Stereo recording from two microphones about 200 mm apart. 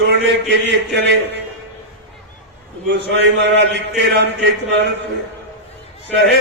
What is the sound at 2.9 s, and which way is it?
A man's voice, 60° right (ahead or behind).